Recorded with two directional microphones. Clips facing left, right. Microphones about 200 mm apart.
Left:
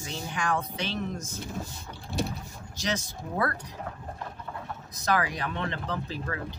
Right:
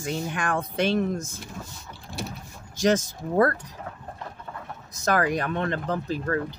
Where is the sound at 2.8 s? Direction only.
45° right (ahead or behind).